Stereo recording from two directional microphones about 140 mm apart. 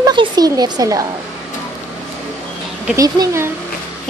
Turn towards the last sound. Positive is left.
turn(degrees=-20)  # may be behind; listen again after turning